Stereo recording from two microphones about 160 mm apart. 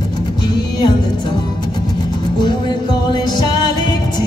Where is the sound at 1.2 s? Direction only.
30° left (ahead or behind).